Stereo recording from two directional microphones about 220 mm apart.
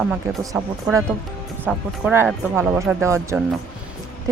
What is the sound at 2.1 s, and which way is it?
Speech, 10° right (ahead or behind).